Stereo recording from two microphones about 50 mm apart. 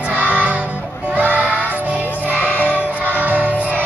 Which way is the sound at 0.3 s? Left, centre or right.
Right.